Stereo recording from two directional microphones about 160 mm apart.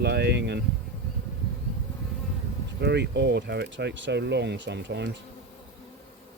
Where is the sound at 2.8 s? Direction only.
90° right.